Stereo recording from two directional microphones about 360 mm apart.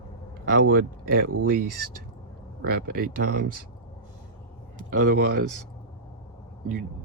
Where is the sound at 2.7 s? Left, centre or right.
Right.